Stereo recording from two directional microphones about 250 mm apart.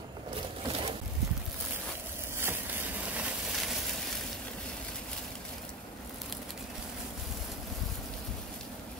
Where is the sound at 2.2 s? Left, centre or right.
Centre.